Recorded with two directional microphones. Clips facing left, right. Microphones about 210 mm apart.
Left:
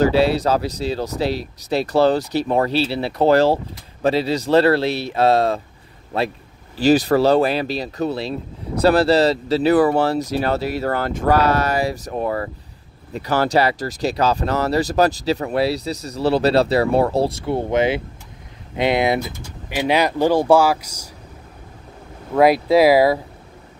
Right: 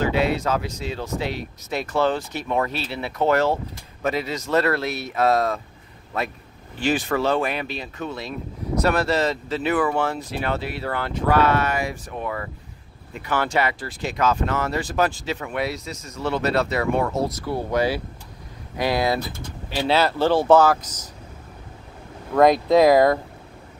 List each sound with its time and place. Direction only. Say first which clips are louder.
0.0 s speech: left 6 dB; 35° left (ahead or behind); by 21.1 s 10° left (ahead or behind)
22.3 s speech: left 2 dB; 5° left (ahead or behind)